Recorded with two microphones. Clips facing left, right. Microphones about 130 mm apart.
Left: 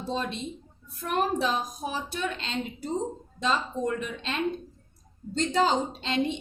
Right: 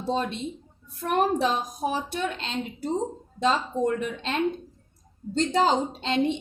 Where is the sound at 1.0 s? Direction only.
50° right (ahead or behind).